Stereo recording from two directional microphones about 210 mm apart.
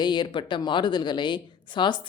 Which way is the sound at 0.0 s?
20° left (ahead or behind).